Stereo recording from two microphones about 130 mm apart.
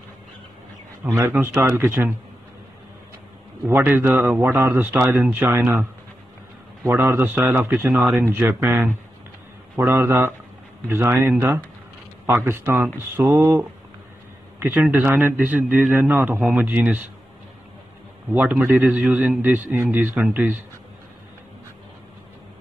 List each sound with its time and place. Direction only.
1.0 s a man's voice: 15° right (ahead or behind)
3.6 s a man's voice: 15° right (ahead or behind)
7.9 s speech: centre (ahead or behind)
8.2 s a man's voice: 20° right (ahead or behind)
18.3 s a man's voice: 15° right (ahead or behind)